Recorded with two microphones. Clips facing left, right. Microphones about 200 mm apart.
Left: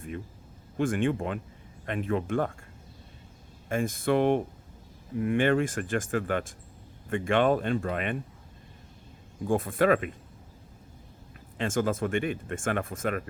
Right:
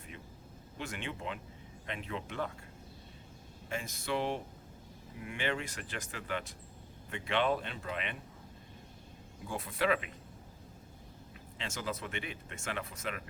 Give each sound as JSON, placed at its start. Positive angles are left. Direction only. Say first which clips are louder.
{"t": 0.8, "sound": "speech", "louder": "left 14 dB", "side_deg": 50}
{"t": 3.7, "sound": "speech", "louder": "left 10 dB", "side_deg": 50}
{"t": 9.4, "sound": "speech", "louder": "left 10 dB", "side_deg": 50}
{"t": 11.5, "sound": "speech", "louder": "left 12 dB", "side_deg": 50}